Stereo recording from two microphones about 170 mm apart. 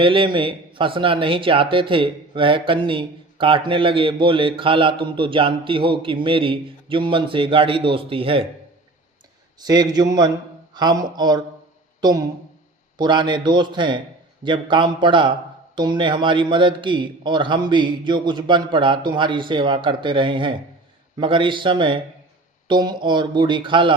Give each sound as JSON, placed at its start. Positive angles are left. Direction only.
{"t": 0.0, "sound": "speech", "side_deg": -30}
{"t": 9.6, "sound": "a man's voice", "side_deg": -25}